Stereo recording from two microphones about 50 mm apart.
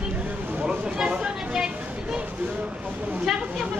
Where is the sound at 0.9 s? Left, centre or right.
Centre.